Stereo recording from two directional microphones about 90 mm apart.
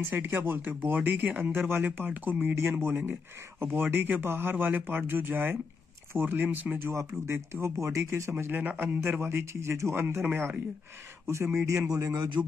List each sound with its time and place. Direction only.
0.1 s speech: 25° right (ahead or behind); by 12.3 s 45° right (ahead or behind)